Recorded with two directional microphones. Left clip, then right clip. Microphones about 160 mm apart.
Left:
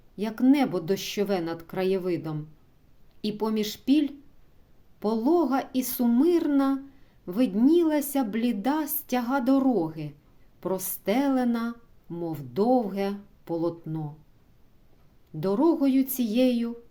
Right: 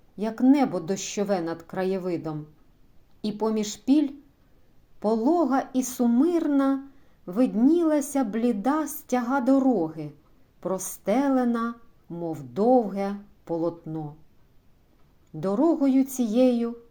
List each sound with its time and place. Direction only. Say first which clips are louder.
0.2 s speech: right 2 dB; 20° left (ahead or behind)
15.4 s speech: even; 20° left (ahead or behind)